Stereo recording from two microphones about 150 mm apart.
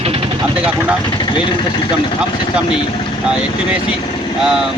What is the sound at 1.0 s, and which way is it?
Speech, 30° left (ahead or behind).